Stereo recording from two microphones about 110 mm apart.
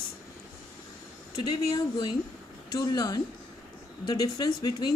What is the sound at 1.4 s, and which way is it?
Speech, 40° left (ahead or behind).